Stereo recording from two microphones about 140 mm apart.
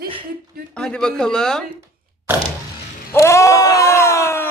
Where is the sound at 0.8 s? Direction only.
5° left (ahead or behind).